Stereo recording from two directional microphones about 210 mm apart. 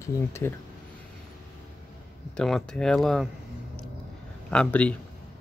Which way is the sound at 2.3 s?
5° left (ahead or behind).